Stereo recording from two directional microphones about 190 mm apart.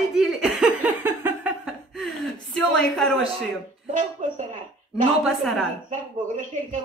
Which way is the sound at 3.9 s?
40° right (ahead or behind).